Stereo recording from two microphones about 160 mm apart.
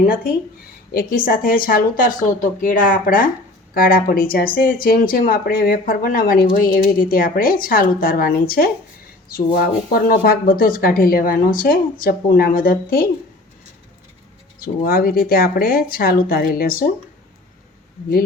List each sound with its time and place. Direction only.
0.9 s speech: 65° left (ahead or behind)
14.6 s speech: 65° left (ahead or behind)